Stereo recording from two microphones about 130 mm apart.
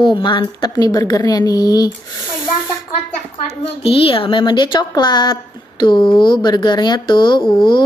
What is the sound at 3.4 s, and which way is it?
A woman's voice, 45° left (ahead or behind).